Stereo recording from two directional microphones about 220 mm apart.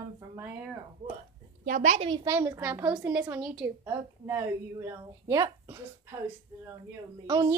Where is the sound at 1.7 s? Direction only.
35° right (ahead or behind).